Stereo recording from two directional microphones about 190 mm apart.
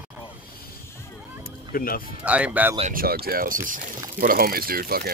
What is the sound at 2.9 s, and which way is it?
Speech, 55° right (ahead or behind).